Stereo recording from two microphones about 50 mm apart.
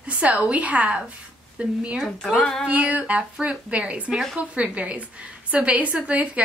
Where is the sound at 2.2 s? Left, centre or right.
Centre.